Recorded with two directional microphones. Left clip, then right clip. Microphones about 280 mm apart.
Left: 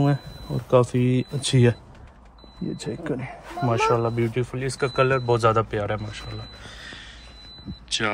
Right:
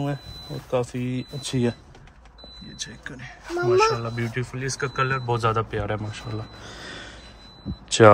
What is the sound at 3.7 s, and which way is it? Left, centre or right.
Speech, centre.